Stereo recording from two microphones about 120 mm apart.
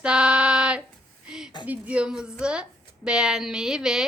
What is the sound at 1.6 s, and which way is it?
A woman's voice, 15° right (ahead or behind).